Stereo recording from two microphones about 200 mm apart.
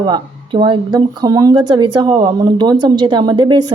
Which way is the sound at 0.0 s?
20° right (ahead or behind).